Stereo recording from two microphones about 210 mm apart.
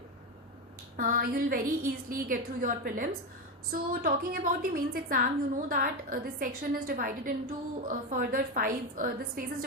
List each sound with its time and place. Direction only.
0.9 s a woman's voice: 40° right (ahead or behind)